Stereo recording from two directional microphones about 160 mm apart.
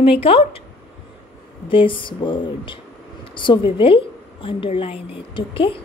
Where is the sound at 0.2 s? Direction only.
35° left (ahead or behind).